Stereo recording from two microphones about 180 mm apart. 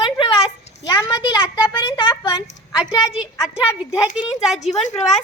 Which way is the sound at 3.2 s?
5° right (ahead or behind).